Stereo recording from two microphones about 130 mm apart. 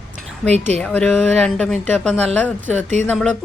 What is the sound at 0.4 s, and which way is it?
Speech, 55° right (ahead or behind).